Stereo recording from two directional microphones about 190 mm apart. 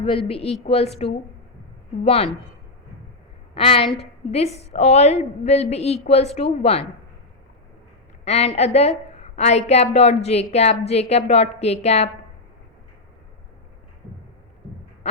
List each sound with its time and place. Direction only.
0.0 s a woman's voice: 30° left (ahead or behind)
3.5 s a woman's voice: 30° left (ahead or behind)
8.2 s a woman's voice: 35° left (ahead or behind)